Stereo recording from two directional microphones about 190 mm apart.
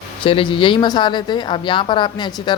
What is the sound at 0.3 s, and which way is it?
A woman's voice, 25° left (ahead or behind).